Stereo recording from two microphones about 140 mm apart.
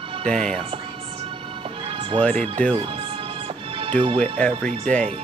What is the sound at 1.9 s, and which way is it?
Music, 40° right (ahead or behind).